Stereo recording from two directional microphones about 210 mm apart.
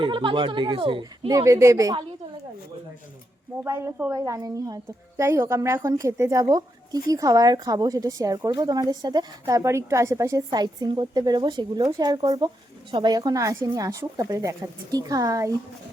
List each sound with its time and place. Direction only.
0.0 s speech: 25° right (ahead or behind)
3.6 s speech: 15° right (ahead or behind)